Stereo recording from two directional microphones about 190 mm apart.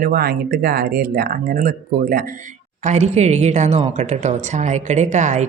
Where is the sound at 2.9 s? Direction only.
35° right (ahead or behind).